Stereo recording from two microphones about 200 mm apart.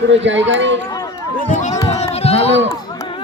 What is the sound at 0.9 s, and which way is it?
Run, 20° left (ahead or behind).